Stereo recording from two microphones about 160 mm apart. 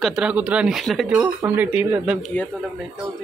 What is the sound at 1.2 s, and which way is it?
Speech, 15° right (ahead or behind).